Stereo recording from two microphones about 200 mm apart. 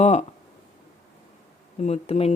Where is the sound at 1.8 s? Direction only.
30° left (ahead or behind).